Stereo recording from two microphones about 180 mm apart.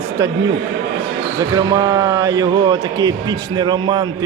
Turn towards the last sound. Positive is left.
turn(degrees=-25)  # may be behind; listen again after turning